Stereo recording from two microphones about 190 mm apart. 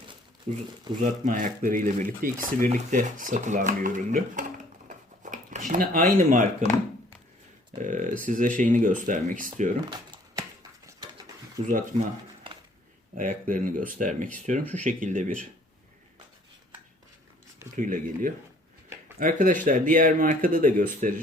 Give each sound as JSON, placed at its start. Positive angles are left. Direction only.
{"t": 0.5, "sound": "speech", "side_deg": -40}
{"t": 4.9, "sound": "a sound", "side_deg": -45}
{"t": 6.6, "sound": "speech", "side_deg": -40}
{"t": 7.8, "sound": "speech", "side_deg": -40}
{"t": 9.9, "sound": "a sound", "side_deg": -25}
{"t": 13.1, "sound": "speech", "side_deg": -45}
{"t": 17.7, "sound": "speech", "side_deg": -45}